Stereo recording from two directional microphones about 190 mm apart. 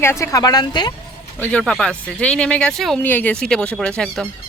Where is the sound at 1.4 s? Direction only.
5° left (ahead or behind).